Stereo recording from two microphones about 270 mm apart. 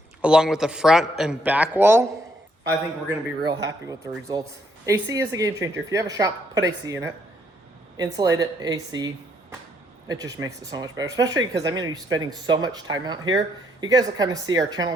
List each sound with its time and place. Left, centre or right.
0.2 s speech: centre
3.4 s a woman's voice: centre
10.1 s a woman's voice: centre